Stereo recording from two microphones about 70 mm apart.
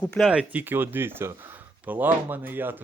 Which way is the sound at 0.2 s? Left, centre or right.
Centre.